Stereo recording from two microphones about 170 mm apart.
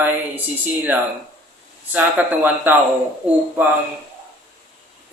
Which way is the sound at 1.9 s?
10° right (ahead or behind).